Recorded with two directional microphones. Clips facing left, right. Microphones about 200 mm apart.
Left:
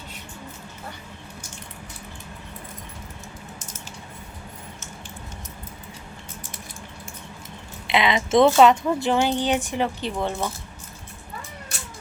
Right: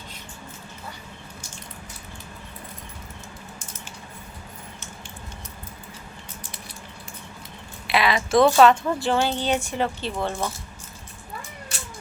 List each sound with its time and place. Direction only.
7.9 s speech: 20° left (ahead or behind)